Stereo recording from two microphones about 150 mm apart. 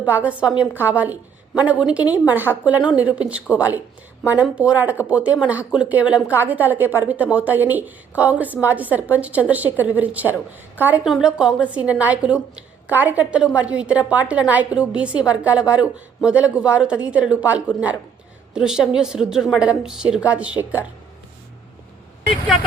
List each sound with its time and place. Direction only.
0.0 s a woman's voice: 10° right (ahead or behind)